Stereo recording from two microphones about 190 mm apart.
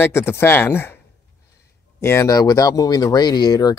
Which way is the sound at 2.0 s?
15° left (ahead or behind).